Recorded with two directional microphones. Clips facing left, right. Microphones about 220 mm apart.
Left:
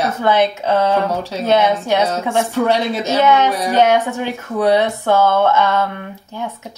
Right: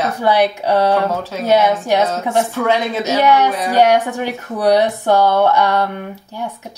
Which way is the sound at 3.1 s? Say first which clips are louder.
Even; 15° right (ahead or behind).